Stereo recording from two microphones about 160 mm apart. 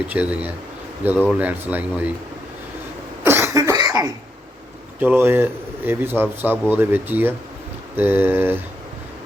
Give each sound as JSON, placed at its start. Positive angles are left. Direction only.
{"t": 0.1, "sound": "speech", "side_deg": -10}
{"t": 3.2, "sound": "cough", "side_deg": -15}
{"t": 4.9, "sound": "speech", "side_deg": -10}